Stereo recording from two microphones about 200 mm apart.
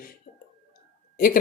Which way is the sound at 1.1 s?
45° left (ahead or behind).